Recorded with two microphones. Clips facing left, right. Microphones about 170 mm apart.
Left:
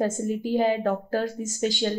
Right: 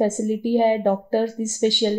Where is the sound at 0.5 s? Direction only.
25° right (ahead or behind).